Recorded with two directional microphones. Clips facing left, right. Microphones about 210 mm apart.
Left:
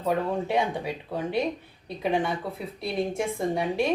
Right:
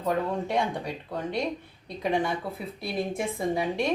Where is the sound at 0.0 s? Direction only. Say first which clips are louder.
Left 1 dB; 5° left (ahead or behind).